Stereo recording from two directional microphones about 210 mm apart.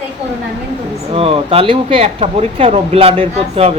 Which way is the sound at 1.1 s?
25° right (ahead or behind).